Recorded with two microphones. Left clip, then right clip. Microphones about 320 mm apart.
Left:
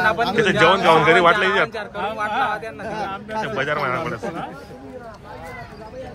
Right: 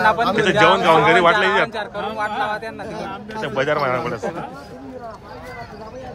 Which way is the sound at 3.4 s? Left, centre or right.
Centre.